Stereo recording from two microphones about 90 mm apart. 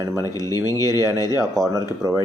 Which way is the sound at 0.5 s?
45° left (ahead or behind).